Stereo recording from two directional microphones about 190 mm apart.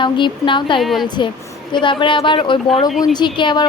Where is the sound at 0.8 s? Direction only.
Centre (ahead or behind).